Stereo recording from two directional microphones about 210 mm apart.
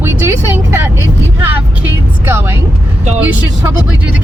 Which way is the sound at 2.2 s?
10° right (ahead or behind).